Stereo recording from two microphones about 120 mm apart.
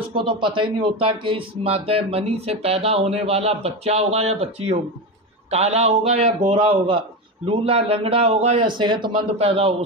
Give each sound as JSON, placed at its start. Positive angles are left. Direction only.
{"t": 0.1, "sound": "speech", "side_deg": -45}
{"t": 6.5, "sound": "a man's voice", "side_deg": -50}
{"t": 8.7, "sound": "speech", "side_deg": -40}
{"t": 9.4, "sound": "speech", "side_deg": -55}